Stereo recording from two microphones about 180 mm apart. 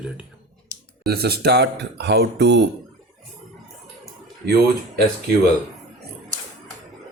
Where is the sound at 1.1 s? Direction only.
60° right (ahead or behind).